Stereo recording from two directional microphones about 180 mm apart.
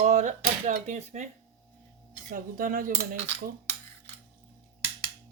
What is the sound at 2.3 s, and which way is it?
Speech, 50° right (ahead or behind).